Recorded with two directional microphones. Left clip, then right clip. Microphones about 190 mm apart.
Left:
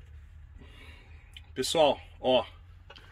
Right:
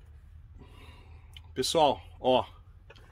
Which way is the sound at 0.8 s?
15° right (ahead or behind).